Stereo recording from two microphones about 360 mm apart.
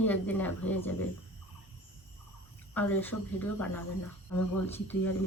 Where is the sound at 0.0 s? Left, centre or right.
Centre.